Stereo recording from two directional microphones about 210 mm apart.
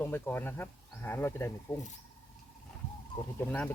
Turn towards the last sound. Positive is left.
turn(degrees=10)  # may be behind; listen again after turning